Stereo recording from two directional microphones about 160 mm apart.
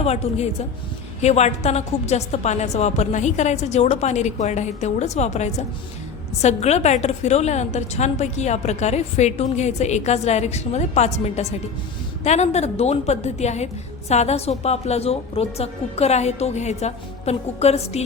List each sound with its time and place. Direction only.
0.0 s a woman's voice: 40° left (ahead or behind)